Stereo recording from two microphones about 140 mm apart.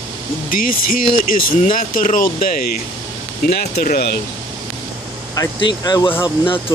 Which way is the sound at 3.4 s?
90° left.